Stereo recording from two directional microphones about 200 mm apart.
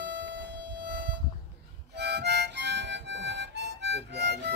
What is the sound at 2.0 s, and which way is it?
Harmonica, 60° right (ahead or behind).